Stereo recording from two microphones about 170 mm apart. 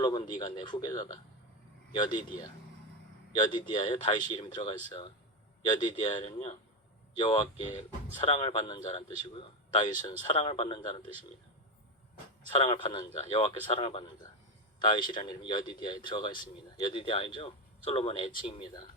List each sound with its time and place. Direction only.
0.0 s speech: 25° left (ahead or behind)
12.5 s a man's voice: 30° left (ahead or behind)